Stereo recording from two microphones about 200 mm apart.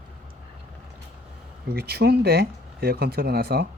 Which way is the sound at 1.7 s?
50° right (ahead or behind).